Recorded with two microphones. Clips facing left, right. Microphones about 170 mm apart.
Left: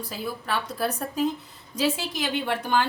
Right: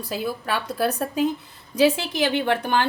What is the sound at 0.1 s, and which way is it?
A woman's voice, 75° right (ahead or behind).